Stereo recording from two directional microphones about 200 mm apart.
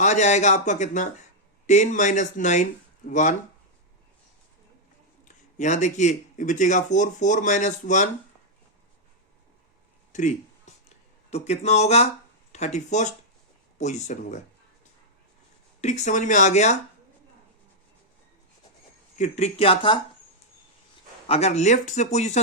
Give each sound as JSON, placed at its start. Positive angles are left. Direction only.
{"t": 0.0, "sound": "speech", "side_deg": 35}
{"t": 5.5, "sound": "speech", "side_deg": 35}
{"t": 10.1, "sound": "a sound", "side_deg": 40}
{"t": 11.3, "sound": "speech", "side_deg": 35}
{"t": 15.8, "sound": "speech", "side_deg": 35}
{"t": 19.1, "sound": "speech", "side_deg": 35}
{"t": 21.2, "sound": "speech", "side_deg": 30}